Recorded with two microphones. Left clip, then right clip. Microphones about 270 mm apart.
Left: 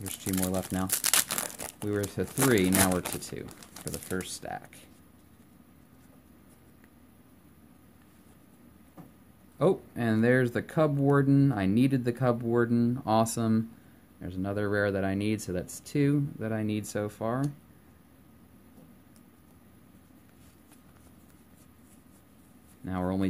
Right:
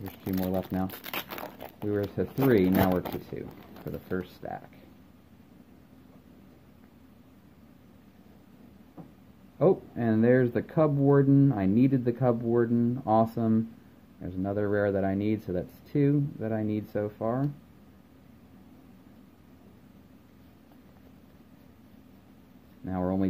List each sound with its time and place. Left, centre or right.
0.0 s speech: left
1.6 s speech: centre
9.6 s speech: centre
22.8 s speech: centre